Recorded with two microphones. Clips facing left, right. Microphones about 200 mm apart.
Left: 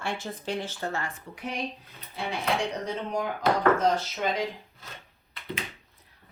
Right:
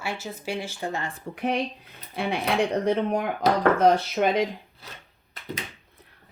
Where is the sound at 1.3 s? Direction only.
60° right (ahead or behind).